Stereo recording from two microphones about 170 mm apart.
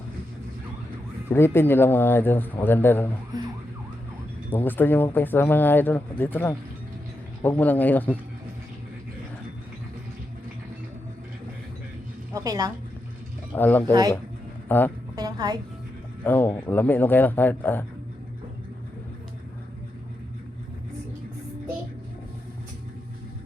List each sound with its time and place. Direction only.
1.3 s speech: 15° left (ahead or behind)
4.5 s speech: 10° left (ahead or behind)
12.3 s a woman's voice: 20° right (ahead or behind)
13.5 s speech: 10° left (ahead or behind)
15.1 s a sound: 25° right (ahead or behind)
16.2 s speech: 10° left (ahead or behind)